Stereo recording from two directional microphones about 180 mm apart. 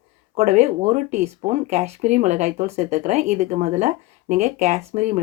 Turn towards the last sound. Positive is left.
turn(degrees=-40)  # may be behind; listen again after turning